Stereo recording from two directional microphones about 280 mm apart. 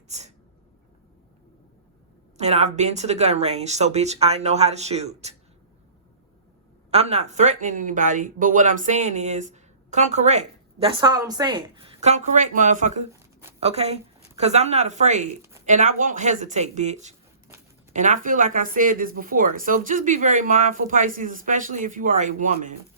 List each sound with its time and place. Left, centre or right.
0.1 s speech: right
2.4 s speech: right
6.9 s speech: right